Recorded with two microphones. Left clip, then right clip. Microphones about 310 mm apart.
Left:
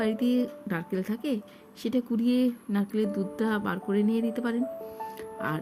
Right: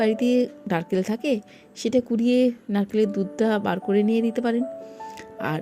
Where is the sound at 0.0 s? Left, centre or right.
Centre.